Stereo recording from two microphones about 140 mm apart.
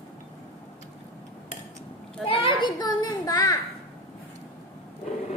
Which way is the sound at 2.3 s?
40° left (ahead or behind).